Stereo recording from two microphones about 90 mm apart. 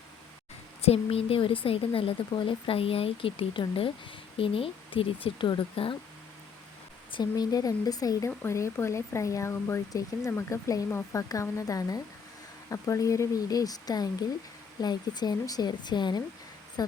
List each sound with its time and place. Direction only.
1.1 s speech: 90° left
2.3 s speech: 75° left (ahead or behind)
4.4 s speech: 90° left
7.2 s a woman's voice: 45° left (ahead or behind)
8.4 s a woman's voice: 30° left (ahead or behind); by 16.2 s 55° left (ahead or behind)